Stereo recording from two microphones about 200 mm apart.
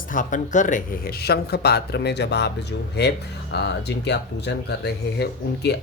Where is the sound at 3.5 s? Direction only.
60° left (ahead or behind).